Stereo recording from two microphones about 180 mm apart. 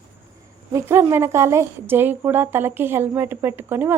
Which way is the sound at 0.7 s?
10° right (ahead or behind).